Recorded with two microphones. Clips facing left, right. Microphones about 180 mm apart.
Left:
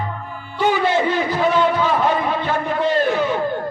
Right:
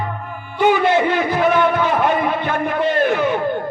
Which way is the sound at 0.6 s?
15° right (ahead or behind).